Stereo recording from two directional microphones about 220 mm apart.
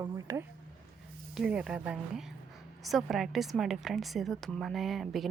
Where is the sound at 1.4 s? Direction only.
5° right (ahead or behind).